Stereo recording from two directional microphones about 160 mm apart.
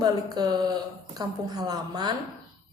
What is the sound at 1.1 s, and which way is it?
Speech, 25° right (ahead or behind).